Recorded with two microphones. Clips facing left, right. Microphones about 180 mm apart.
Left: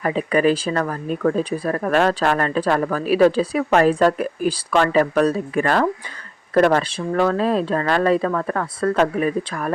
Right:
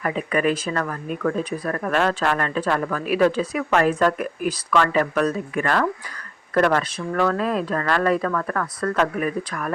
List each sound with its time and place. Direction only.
0.0 s speech: 30° left (ahead or behind)